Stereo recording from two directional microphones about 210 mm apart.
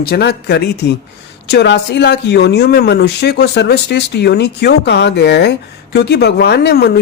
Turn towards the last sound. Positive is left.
turn(degrees=50)  # may be behind; listen again after turning